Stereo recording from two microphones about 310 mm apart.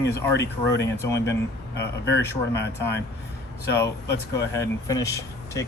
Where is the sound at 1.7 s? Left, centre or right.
Left.